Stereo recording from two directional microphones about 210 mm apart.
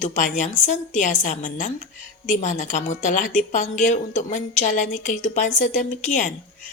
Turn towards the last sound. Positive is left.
turn(degrees=35)  # may be behind; listen again after turning